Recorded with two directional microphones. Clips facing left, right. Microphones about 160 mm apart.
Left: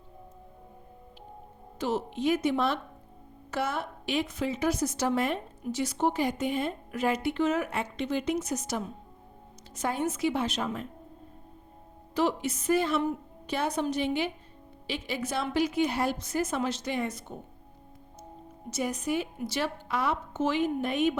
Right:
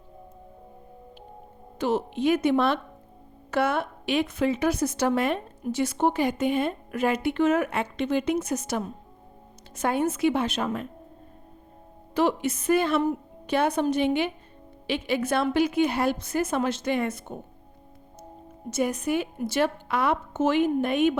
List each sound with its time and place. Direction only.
1.8 s a woman's voice: 60° right (ahead or behind)
12.1 s a woman's voice: 55° right (ahead or behind)
18.7 s a woman's voice: 55° right (ahead or behind)